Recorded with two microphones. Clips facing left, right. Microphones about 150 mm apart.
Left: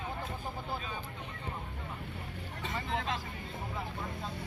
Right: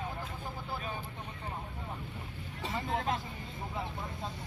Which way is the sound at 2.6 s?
35° right (ahead or behind).